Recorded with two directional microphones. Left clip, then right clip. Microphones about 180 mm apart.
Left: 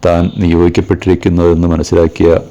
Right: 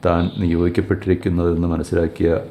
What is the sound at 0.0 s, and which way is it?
Speech, 40° left (ahead or behind).